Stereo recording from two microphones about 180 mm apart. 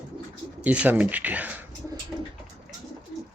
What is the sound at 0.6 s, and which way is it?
Speech, 10° right (ahead or behind).